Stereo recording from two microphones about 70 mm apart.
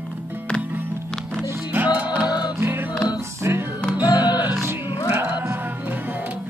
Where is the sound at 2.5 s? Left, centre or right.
Right.